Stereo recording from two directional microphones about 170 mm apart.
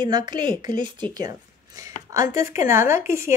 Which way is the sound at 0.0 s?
25° right (ahead or behind).